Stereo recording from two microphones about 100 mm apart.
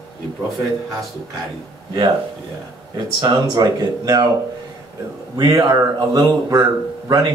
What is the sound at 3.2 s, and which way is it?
Speech, 40° right (ahead or behind).